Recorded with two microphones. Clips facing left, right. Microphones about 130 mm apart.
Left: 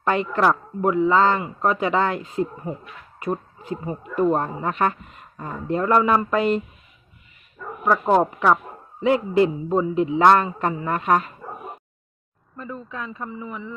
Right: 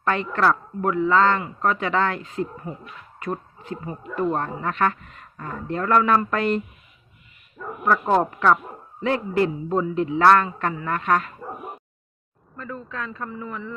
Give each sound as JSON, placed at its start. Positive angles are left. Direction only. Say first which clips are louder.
{"t": 0.1, "sound": "a man's voice", "louder": "left 1 dB", "side_deg": 15}
{"t": 6.3, "sound": "speech", "louder": "left 2 dB", "side_deg": 5}
{"t": 7.9, "sound": "a man's voice", "louder": "left 2 dB", "side_deg": 10}
{"t": 9.0, "sound": "a man's voice", "louder": "left 4 dB", "side_deg": 15}
{"t": 12.5, "sound": "a man's voice", "louder": "even", "side_deg": 15}